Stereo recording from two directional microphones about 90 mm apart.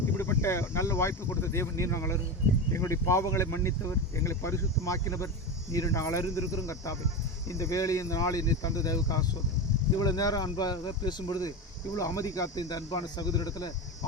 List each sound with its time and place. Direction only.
0.2 s speech: 30° left (ahead or behind); by 13.7 s 45° left (ahead or behind)